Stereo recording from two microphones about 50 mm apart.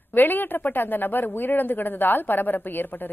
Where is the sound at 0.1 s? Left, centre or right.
Left.